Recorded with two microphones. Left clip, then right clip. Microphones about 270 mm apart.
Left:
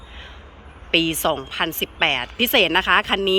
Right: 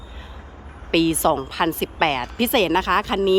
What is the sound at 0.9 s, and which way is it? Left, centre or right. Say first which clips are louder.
Speech: right 1 dB; centre.